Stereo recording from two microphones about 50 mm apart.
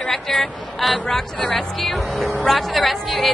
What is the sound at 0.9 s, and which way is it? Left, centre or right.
A woman's voice, centre.